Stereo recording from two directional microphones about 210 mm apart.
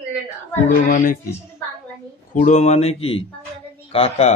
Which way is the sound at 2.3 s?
35° left (ahead or behind).